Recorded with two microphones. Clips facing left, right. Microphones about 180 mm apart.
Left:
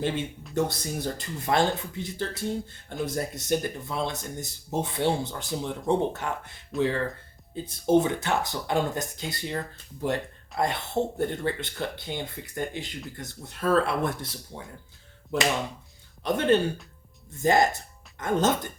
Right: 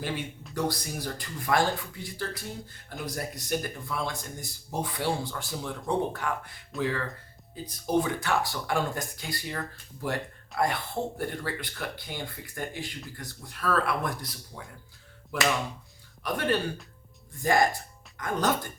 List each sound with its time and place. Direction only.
0.5 s speech: 25° left (ahead or behind)
11.2 s speech: 25° left (ahead or behind)